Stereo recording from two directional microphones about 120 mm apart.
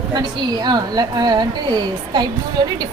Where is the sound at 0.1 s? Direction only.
35° right (ahead or behind).